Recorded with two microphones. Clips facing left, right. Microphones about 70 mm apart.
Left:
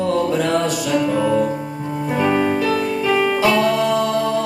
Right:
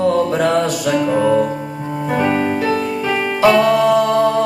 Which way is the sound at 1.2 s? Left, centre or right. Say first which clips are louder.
Right 5 dB; right.